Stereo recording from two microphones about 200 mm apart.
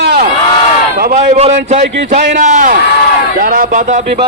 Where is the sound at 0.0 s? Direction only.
55° right (ahead or behind).